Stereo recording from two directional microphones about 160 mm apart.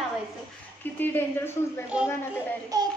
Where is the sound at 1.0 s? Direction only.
10° left (ahead or behind).